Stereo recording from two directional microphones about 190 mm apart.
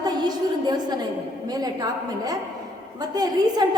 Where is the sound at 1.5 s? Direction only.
20° right (ahead or behind).